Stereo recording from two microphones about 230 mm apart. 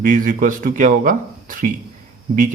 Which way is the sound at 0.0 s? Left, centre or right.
Right.